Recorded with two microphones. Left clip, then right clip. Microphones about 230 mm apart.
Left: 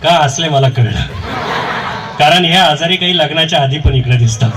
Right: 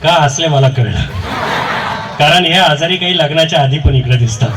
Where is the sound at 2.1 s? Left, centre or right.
Left.